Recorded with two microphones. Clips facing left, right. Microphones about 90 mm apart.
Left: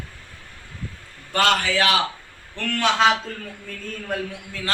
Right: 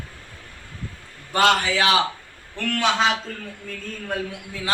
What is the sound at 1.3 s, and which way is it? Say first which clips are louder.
Speech: right 1 dB; 20° right (ahead or behind).